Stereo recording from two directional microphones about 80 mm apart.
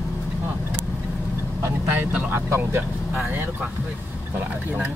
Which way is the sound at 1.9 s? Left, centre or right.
Right.